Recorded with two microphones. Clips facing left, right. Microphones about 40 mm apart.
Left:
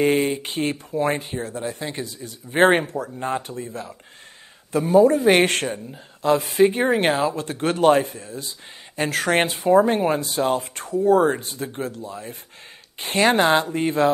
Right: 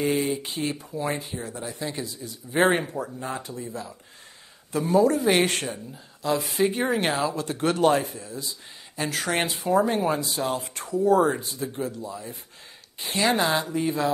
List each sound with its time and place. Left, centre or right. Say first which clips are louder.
0.0 s speech: left 5 dB; left